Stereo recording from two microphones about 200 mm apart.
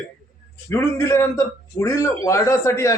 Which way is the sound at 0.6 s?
15° left (ahead or behind).